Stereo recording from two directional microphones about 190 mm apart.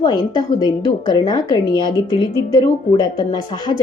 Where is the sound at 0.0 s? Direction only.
25° left (ahead or behind).